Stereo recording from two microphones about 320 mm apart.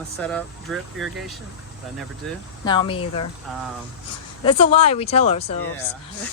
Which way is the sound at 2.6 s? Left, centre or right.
Centre.